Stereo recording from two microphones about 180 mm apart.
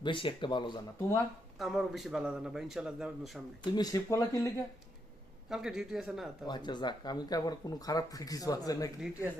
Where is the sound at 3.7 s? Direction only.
20° left (ahead or behind).